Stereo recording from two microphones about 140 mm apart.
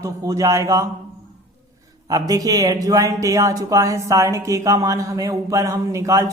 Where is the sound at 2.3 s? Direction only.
25° right (ahead or behind).